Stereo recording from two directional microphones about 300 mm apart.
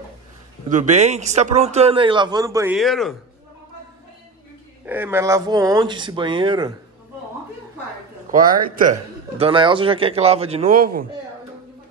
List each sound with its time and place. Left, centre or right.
0.7 s speech: right; by 3.2 s centre
4.8 s speech: centre
8.3 s speech: right
9.4 s speech: centre